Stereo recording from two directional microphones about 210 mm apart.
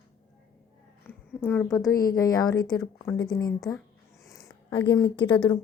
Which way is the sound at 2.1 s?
15° left (ahead or behind).